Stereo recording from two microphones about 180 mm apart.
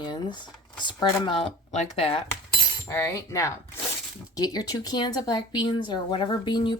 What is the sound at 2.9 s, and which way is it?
Speech, 15° left (ahead or behind).